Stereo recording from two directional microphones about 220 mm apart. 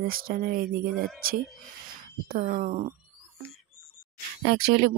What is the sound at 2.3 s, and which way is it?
Speech, 40° right (ahead or behind).